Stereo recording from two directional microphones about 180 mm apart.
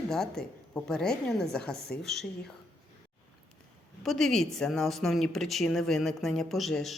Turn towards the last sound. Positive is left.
turn(degrees=0)  # may be behind; listen again after turning